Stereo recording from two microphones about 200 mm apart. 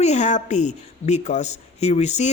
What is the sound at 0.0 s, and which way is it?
Speech, 35° left (ahead or behind).